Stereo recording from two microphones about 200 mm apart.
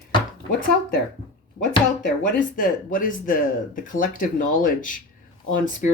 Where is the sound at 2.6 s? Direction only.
45° left (ahead or behind).